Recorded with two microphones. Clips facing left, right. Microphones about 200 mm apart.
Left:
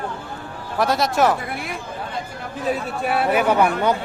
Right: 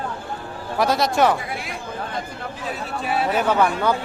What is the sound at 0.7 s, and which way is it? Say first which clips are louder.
Speech: even; centre (ahead or behind).